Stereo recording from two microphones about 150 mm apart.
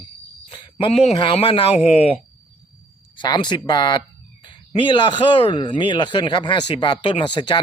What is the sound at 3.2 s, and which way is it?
Speech, 30° left (ahead or behind).